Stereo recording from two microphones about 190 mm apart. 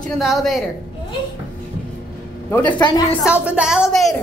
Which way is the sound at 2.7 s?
25° left (ahead or behind).